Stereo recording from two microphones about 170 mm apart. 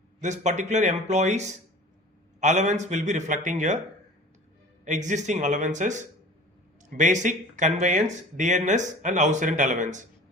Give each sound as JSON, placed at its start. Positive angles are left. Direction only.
{"t": 0.2, "sound": "speech", "side_deg": -45}
{"t": 4.9, "sound": "speech", "side_deg": -45}